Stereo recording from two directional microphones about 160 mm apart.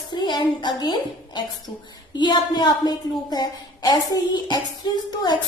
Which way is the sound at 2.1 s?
30° left (ahead or behind).